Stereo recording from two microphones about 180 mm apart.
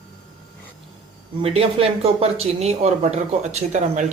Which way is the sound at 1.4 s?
30° right (ahead or behind).